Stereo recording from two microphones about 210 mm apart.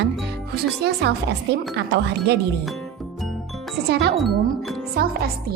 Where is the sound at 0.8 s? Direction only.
50° right (ahead or behind).